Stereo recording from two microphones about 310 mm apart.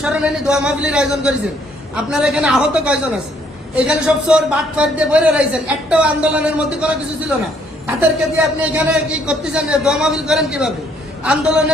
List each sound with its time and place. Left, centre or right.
0.0 s a man's voice: centre
8.4 s a man's voice: centre